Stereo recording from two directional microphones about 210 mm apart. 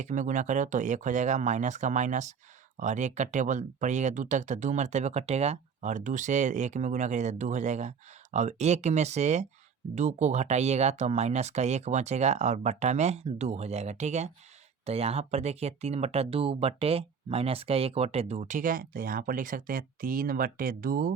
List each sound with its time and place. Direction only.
0.0 s speech: 35° right (ahead or behind)